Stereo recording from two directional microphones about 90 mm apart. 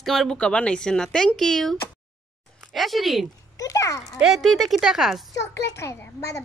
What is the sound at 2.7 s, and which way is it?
Speech, centre (ahead or behind).